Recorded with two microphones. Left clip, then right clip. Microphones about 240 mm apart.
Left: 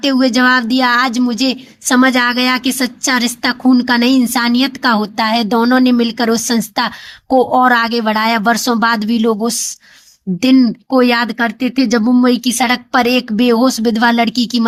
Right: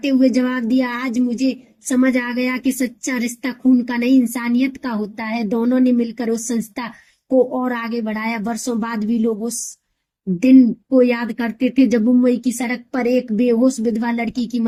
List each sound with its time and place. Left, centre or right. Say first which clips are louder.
0.0 s speech: left 5 dB; left
10.4 s speech: left 1 dB; left